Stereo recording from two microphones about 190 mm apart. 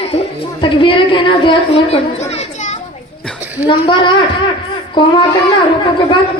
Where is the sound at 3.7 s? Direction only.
25° left (ahead or behind).